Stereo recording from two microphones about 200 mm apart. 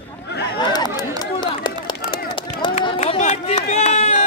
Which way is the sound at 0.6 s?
20° left (ahead or behind).